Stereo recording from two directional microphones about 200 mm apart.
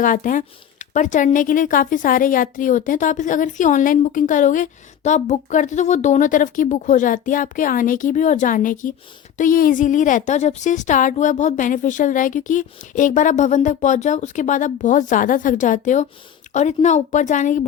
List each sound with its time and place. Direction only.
0.0 s speech: 40° left (ahead or behind)